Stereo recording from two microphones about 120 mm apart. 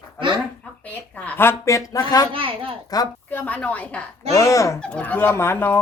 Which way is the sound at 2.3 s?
45° right (ahead or behind).